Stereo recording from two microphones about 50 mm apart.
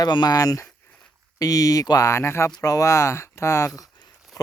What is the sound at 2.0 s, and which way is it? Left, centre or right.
Speech, left.